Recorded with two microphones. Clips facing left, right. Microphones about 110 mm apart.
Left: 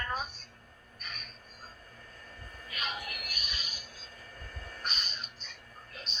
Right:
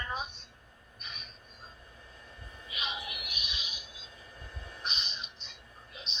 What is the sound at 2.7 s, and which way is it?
Music, 20° right (ahead or behind).